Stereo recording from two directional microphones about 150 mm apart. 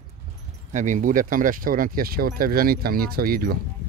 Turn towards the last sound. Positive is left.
turn(degrees=-80)